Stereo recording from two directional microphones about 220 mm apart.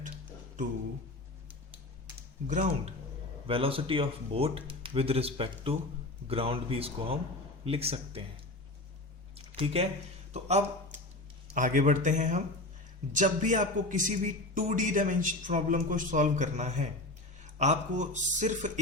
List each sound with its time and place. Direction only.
2.5 s a man's voice: 35° right (ahead or behind)
9.6 s speech: 25° right (ahead or behind)
10.3 s a sound: 30° right (ahead or behind)
11.5 s a man's voice: 35° right (ahead or behind)